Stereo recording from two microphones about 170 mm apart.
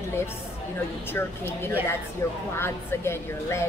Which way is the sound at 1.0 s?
15° left (ahead or behind).